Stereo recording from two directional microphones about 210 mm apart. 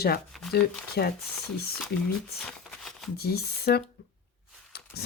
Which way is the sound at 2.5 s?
Centre (ahead or behind).